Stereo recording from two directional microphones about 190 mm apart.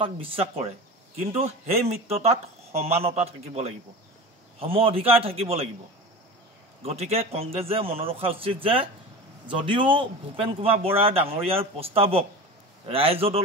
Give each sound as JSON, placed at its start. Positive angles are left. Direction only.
{"t": 0.0, "sound": "a man's voice", "side_deg": -30}
{"t": 6.8, "sound": "a man's voice", "side_deg": -30}